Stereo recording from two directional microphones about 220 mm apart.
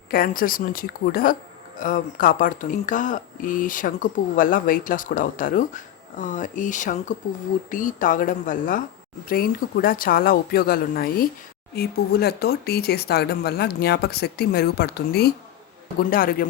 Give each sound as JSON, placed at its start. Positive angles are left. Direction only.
{"t": 0.1, "sound": "speech", "side_deg": 40}